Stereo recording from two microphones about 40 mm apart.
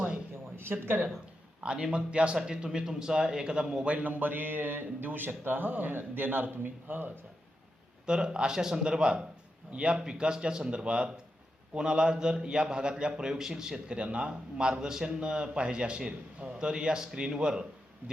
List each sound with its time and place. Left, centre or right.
0.5 s speech: right
1.6 s a man's voice: right
3.8 s speech: right
8.0 s a man's voice: right